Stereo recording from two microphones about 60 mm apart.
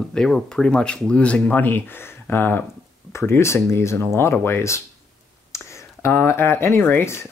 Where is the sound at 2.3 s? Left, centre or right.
Left.